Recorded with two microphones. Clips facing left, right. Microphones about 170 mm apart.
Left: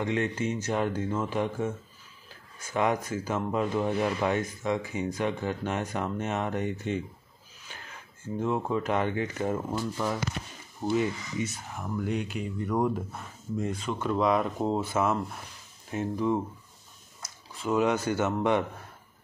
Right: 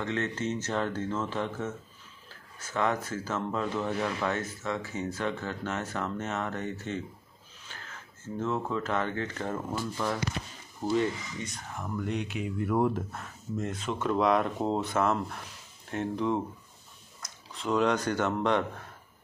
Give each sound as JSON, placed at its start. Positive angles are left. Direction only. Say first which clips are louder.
{"t": 0.0, "sound": "speech", "louder": "left 3 dB", "side_deg": 15}
{"t": 17.5, "sound": "speech", "louder": "left 1 dB", "side_deg": 5}